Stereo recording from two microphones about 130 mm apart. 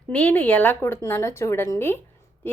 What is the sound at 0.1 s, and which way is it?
Speech, 10° left (ahead or behind).